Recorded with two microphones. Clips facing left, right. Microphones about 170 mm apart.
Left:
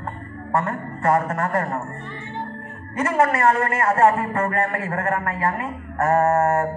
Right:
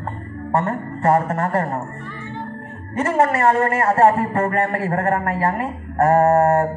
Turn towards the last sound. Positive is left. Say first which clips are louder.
# right 4 dB
turn(degrees=-35)  # may be behind; listen again after turning